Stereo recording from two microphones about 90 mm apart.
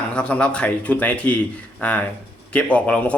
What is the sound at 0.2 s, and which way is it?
A man's voice, 10° left (ahead or behind).